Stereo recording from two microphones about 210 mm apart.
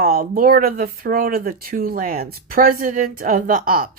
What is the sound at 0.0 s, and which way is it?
Speech, 45° right (ahead or behind).